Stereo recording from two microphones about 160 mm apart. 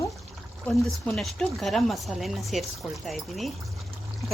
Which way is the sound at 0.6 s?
Centre (ahead or behind).